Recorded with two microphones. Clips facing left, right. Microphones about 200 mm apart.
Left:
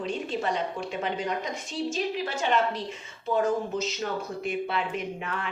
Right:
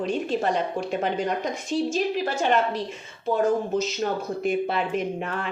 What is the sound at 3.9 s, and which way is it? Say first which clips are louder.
Speech: right 5 dB; 45° right (ahead or behind).